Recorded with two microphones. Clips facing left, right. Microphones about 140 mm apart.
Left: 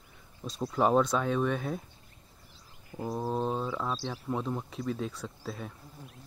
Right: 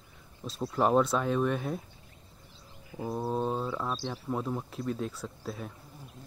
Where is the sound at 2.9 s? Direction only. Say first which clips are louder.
Even; 5° right (ahead or behind).